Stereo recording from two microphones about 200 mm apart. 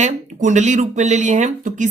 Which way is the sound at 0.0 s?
35° right (ahead or behind).